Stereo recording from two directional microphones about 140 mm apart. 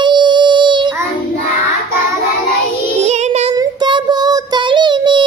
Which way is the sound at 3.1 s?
50° right (ahead or behind).